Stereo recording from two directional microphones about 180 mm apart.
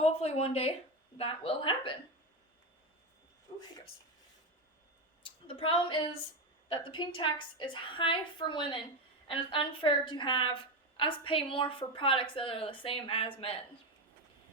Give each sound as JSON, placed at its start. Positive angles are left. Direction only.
{"t": 0.0, "sound": "speech", "side_deg": 35}
{"t": 5.5, "sound": "a woman's voice", "side_deg": 30}